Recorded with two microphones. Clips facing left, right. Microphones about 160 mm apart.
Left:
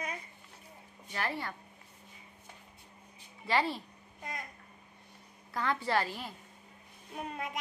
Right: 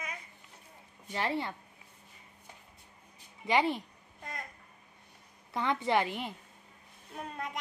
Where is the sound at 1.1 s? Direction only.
25° right (ahead or behind).